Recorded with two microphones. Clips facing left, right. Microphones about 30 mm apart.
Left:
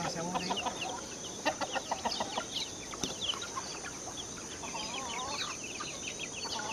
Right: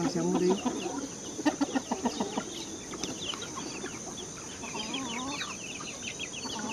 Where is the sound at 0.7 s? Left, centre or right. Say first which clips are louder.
Right 4 dB; left.